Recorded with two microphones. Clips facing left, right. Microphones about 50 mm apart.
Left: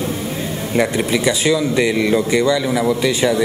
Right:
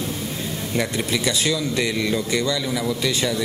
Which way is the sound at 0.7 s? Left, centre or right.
Centre.